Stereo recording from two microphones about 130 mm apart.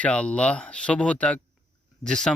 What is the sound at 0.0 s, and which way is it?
Speech, 10° left (ahead or behind).